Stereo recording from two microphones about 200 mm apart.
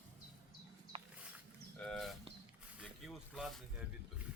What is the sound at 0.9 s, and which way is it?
Wild animals, 25° right (ahead or behind).